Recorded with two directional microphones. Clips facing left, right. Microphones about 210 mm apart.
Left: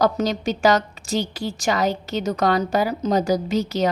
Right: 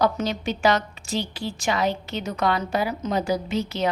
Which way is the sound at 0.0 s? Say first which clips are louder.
Left 3 dB; 40° left (ahead or behind).